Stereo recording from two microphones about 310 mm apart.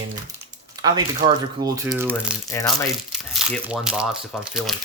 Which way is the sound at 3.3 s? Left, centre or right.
Centre.